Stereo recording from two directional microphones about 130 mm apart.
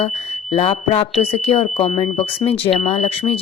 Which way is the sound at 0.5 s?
50° left (ahead or behind).